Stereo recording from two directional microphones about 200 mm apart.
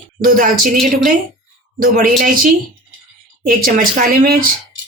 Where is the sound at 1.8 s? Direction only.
45° right (ahead or behind).